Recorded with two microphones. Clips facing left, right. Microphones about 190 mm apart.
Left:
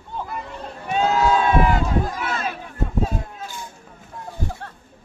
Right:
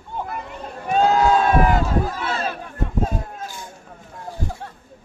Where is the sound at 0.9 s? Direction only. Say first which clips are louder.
Right 2 dB; 45° right (ahead or behind).